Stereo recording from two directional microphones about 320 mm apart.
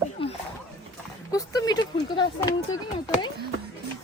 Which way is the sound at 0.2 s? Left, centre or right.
Centre.